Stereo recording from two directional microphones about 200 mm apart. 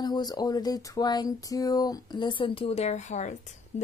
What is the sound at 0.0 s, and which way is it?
Speech, 20° left (ahead or behind).